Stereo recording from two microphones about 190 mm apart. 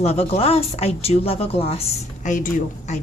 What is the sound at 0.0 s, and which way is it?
Speech, 30° left (ahead or behind).